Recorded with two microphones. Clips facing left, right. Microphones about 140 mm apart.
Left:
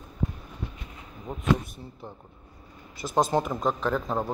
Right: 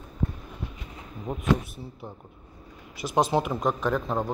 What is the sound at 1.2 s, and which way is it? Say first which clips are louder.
Speech: right 1 dB; 10° right (ahead or behind).